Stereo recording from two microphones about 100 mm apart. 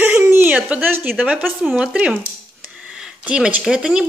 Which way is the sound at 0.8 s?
20° right (ahead or behind).